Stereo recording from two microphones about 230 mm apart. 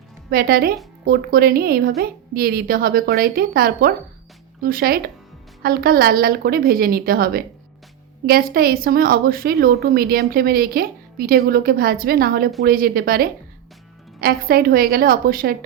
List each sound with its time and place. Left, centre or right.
0.3 s a woman's voice: right